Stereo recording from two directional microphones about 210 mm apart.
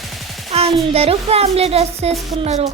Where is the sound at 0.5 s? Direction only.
30° right (ahead or behind).